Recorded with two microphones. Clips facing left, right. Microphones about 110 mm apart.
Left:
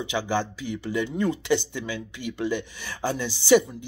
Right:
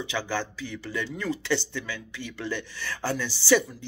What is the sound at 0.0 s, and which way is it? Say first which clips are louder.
A woman's voice: left 4 dB; 15° left (ahead or behind).